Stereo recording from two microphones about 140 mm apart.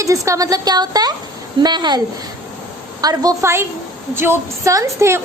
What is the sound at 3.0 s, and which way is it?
A woman's voice, 25° right (ahead or behind).